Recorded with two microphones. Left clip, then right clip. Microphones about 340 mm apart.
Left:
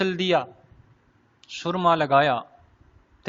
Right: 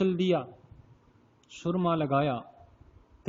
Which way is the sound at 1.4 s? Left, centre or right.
Centre.